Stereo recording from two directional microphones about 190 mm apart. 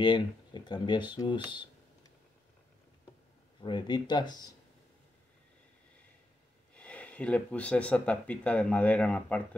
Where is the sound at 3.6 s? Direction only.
25° left (ahead or behind).